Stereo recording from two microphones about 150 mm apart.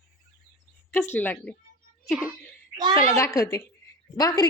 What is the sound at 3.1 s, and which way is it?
A child's voice, 20° left (ahead or behind).